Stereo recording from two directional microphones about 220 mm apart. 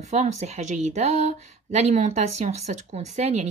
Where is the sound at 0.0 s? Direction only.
30° right (ahead or behind).